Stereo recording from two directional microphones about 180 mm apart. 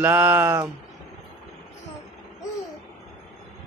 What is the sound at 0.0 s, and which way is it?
Speech, 10° right (ahead or behind).